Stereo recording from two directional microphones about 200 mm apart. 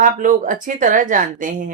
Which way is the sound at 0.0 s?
40° right (ahead or behind).